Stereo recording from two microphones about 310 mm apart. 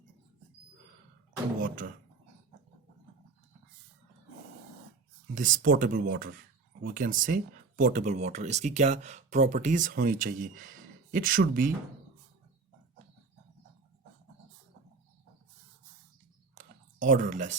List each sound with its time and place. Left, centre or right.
1.6 s speech: right
5.3 s speech: right
16.6 s a sound: right